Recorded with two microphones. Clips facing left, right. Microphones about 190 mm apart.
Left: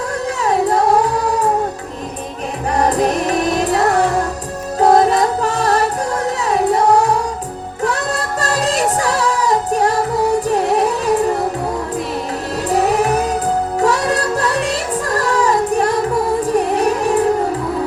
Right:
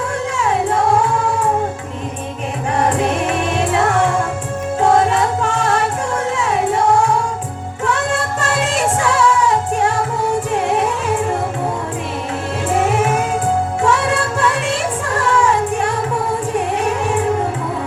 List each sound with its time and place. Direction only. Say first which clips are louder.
0.3 s music: left 2 dB; 35° left (ahead or behind)
2.7 s music: left 2 dB; 35° left (ahead or behind)
12.6 s music: left 1 dB; 35° left (ahead or behind)